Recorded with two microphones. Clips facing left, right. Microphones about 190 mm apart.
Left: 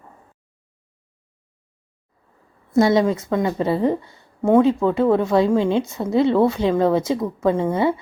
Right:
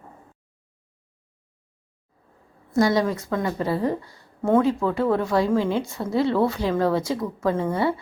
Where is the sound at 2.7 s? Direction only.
25° left (ahead or behind).